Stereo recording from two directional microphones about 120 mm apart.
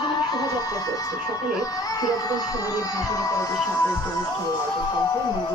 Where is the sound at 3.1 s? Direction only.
30° left (ahead or behind).